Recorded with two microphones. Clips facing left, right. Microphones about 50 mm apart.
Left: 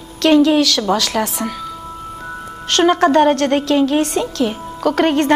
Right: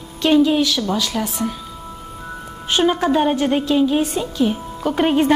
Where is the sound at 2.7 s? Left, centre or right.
Left.